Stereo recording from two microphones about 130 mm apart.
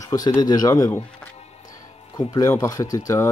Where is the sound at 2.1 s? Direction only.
25° left (ahead or behind).